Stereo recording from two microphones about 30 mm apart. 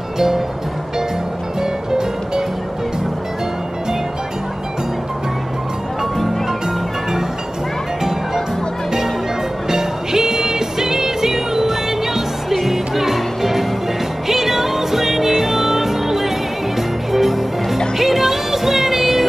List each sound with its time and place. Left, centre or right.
1.6 s music: right
9.7 s music: centre